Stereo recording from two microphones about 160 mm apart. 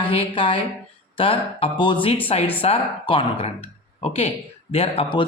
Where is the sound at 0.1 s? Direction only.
35° left (ahead or behind).